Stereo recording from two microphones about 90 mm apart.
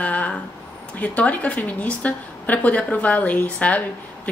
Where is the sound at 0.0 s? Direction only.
15° left (ahead or behind).